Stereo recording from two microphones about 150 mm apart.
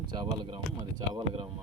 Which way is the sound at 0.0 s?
30° right (ahead or behind).